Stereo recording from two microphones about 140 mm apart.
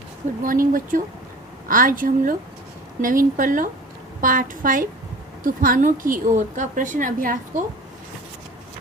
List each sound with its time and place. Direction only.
0.4 s a woman's voice: 85° right
3.0 s a woman's voice: 75° right (ahead or behind)